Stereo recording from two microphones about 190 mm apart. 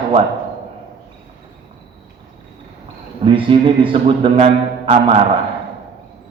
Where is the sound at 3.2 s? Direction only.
25° right (ahead or behind).